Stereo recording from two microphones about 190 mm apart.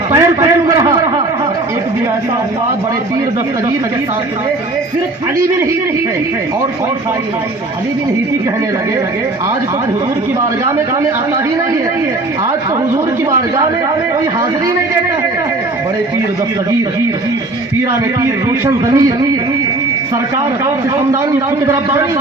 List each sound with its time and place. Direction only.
0.1 s a sound: 15° right (ahead or behind)
18.2 s speech: 15° right (ahead or behind)
21.1 s speech: 15° right (ahead or behind)